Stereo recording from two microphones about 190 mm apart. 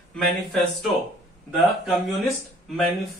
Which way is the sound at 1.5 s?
Centre (ahead or behind).